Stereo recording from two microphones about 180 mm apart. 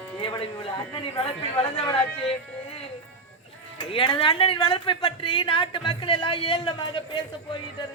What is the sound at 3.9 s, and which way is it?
A woman's voice, 30° left (ahead or behind).